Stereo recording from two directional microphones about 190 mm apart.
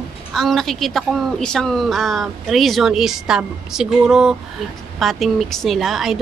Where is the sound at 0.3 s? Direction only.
Centre (ahead or behind).